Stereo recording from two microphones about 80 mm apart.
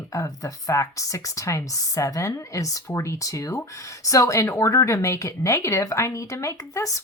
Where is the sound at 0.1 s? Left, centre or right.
Left.